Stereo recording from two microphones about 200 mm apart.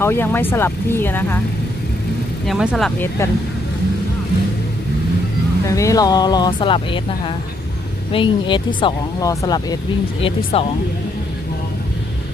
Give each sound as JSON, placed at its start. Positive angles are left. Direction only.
{"t": 0.0, "sound": "speech", "side_deg": 10}
{"t": 2.5, "sound": "speech", "side_deg": 0}
{"t": 5.6, "sound": "speech", "side_deg": 15}
{"t": 10.2, "sound": "speech", "side_deg": 30}